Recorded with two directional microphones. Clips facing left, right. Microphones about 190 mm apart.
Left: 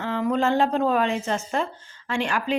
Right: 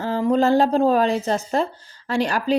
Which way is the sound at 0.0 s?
35° right (ahead or behind).